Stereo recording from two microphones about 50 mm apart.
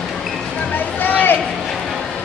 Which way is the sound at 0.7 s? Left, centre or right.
Left.